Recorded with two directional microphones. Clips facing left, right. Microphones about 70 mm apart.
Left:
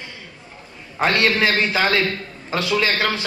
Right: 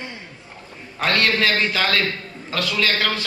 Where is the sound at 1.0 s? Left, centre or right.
Left.